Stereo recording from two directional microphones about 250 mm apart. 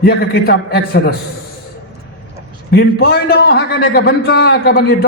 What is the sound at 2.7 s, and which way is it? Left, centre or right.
A man's voice, left.